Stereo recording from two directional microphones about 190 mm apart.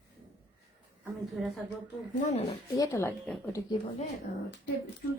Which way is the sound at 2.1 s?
35° left (ahead or behind).